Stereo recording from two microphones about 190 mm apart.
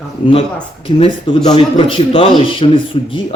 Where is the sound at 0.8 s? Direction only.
25° left (ahead or behind).